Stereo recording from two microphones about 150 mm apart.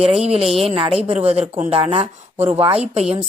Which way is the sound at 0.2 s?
45° right (ahead or behind).